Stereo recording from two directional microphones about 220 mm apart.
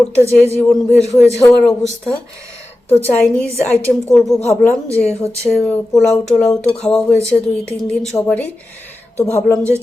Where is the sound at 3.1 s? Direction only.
5° left (ahead or behind).